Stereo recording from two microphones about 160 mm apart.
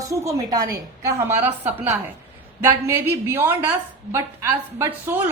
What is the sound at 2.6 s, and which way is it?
A woman's voice, 15° right (ahead or behind).